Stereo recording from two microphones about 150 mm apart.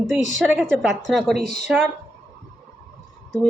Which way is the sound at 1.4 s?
50° left (ahead or behind).